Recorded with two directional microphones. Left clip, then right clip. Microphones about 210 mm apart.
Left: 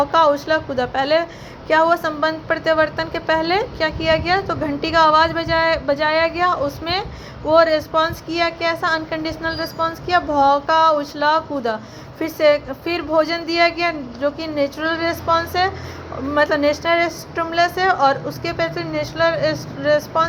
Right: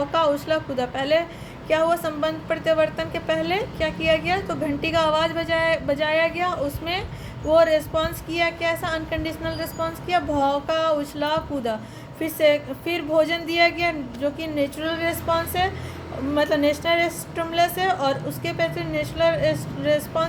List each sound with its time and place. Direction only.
0.0 s a woman's voice: 10° left (ahead or behind)